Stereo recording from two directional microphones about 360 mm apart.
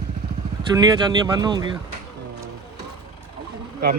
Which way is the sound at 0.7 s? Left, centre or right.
Centre.